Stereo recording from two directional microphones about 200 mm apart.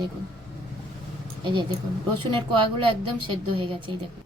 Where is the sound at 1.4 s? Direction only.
20° right (ahead or behind).